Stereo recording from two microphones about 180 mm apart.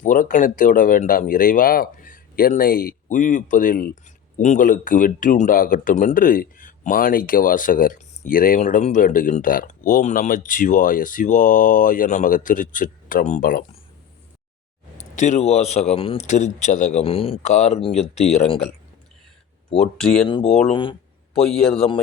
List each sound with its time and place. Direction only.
0.0 s speech: 45° left (ahead or behind)
14.9 s speech: 40° left (ahead or behind)
19.7 s speech: 5° left (ahead or behind)
20.2 s speech: 35° left (ahead or behind)
21.3 s speech: 5° left (ahead or behind)